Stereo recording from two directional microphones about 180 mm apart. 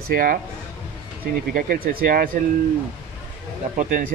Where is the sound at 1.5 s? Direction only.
50° right (ahead or behind).